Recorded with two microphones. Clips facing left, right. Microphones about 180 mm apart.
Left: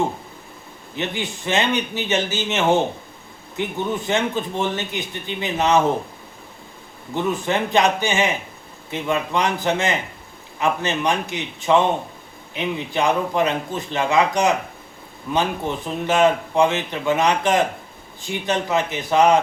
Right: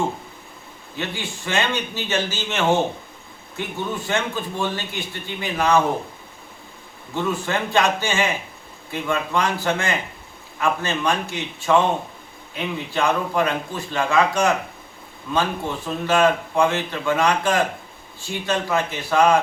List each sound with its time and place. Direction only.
0.9 s speech: 20° left (ahead or behind)
7.1 s speech: 20° left (ahead or behind)